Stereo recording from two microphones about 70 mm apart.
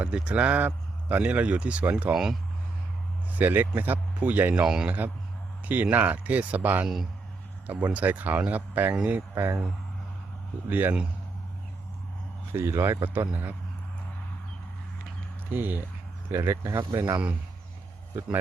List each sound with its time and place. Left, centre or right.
0.0 s speech: centre
3.3 s speech: right
4.6 s a man's voice: centre
4.9 s speech: right
6.8 s a man's voice: centre
7.7 s speech: right
9.3 s speech: right
10.7 s speech: right
12.5 s speech: right
15.5 s speech: right
16.3 s speech: right